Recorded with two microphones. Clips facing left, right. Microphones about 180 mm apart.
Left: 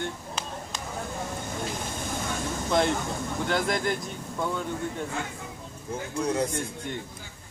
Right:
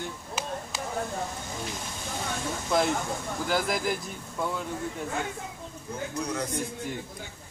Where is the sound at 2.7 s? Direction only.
5° right (ahead or behind).